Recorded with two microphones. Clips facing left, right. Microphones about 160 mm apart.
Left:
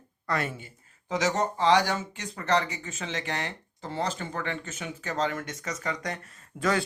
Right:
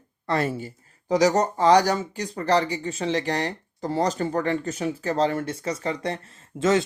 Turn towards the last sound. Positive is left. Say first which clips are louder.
# right 6 dB
turn(degrees=-20)  # may be behind; listen again after turning